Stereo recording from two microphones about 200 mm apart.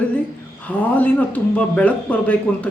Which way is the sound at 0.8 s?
10° left (ahead or behind).